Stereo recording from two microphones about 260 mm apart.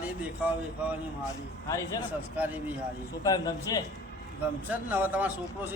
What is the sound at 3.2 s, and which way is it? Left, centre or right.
Speech, centre.